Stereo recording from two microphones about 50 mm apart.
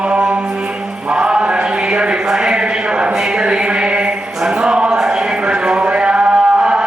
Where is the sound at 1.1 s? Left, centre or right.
Centre.